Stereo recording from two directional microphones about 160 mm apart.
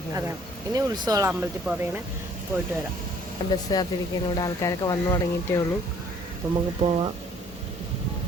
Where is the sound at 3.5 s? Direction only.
25° left (ahead or behind).